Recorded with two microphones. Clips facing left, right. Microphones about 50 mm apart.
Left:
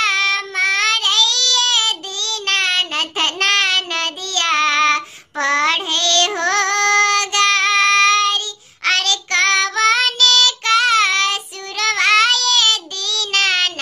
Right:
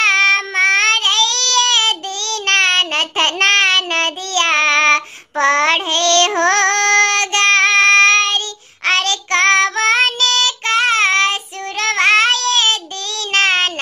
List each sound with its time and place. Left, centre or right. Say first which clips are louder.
0.0 s baby cry: right 4 dB; right
5.4 s child singing: right 3 dB; right
8.8 s child singing: right 2 dB; right